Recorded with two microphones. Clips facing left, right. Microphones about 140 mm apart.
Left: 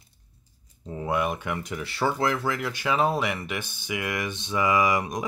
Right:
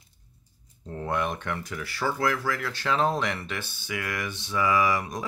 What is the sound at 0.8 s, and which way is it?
Speech, 10° left (ahead or behind).